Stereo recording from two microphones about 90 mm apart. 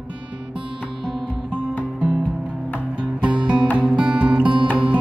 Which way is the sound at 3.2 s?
15° right (ahead or behind).